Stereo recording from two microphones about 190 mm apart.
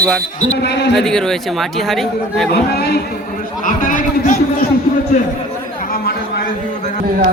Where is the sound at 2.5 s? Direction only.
60° left (ahead or behind).